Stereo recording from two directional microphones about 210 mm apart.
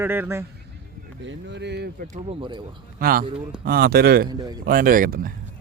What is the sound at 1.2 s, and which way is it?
Speech, 55° right (ahead or behind).